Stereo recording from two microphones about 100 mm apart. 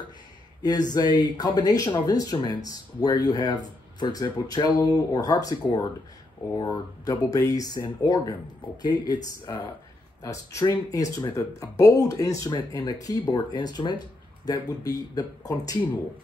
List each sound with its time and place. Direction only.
0.6 s speech: 40° left (ahead or behind)
10.2 s speech: 35° left (ahead or behind)